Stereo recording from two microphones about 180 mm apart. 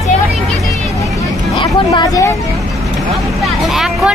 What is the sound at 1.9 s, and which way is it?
Speech, 20° left (ahead or behind).